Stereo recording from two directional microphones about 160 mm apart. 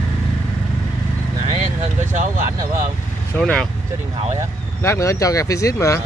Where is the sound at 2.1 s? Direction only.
50° right (ahead or behind).